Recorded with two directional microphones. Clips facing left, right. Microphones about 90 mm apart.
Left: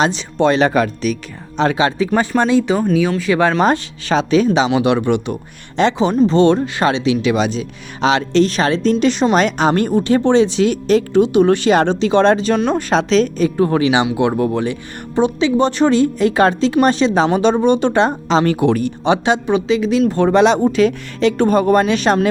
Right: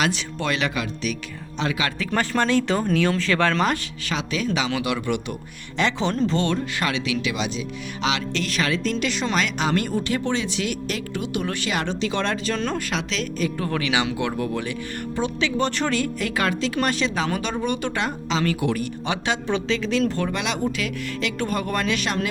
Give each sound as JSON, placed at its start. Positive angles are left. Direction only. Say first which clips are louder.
{"t": 0.0, "sound": "a woman's voice", "louder": "left 9 dB", "side_deg": 30}
{"t": 2.3, "sound": "speech", "louder": "left 4 dB", "side_deg": 15}
{"t": 3.6, "sound": "speech", "louder": "left 8 dB", "side_deg": 30}
{"t": 6.0, "sound": "a woman's voice", "louder": "left 13 dB", "side_deg": 15}
{"t": 12.7, "sound": "speech", "louder": "left 12 dB", "side_deg": 35}
{"t": 20.3, "sound": "a woman's voice", "louder": "left 13 dB", "side_deg": 35}